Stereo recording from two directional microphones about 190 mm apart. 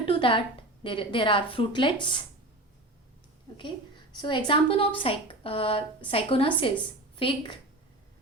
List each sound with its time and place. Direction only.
0.0 s a sound: 25° left (ahead or behind)
0.9 s speech: 25° left (ahead or behind)
4.1 s speech: 25° left (ahead or behind)